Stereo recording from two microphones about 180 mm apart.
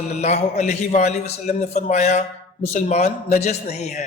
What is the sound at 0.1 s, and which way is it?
A man's voice, 40° left (ahead or behind).